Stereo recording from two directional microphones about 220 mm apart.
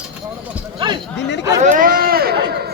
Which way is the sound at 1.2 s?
55° left (ahead or behind).